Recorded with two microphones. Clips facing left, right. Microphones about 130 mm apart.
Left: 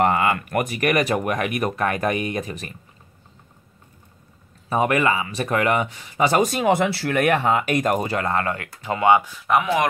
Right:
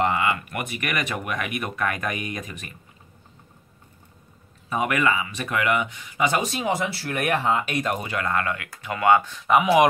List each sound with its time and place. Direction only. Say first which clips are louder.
0.0 s speech: left 4 dB; 45° left (ahead or behind)
4.6 s speech: left 3 dB; 35° left (ahead or behind)
6.5 s speech: left 6 dB; 60° left (ahead or behind); by 9.3 s 20° left (ahead or behind)
9.3 s speech: even; centre (ahead or behind)
9.6 s speech: right 4 dB; 10° right (ahead or behind)